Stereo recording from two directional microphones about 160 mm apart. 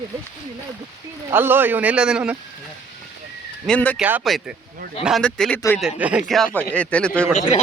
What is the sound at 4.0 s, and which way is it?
Speech, 10° right (ahead or behind).